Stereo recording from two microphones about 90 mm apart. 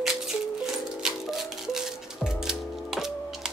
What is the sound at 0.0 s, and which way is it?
Music, 5° right (ahead or behind).